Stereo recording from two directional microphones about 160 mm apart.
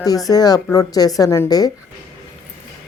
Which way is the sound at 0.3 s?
25° left (ahead or behind).